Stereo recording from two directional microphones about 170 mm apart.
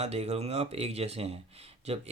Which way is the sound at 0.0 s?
40° right (ahead or behind).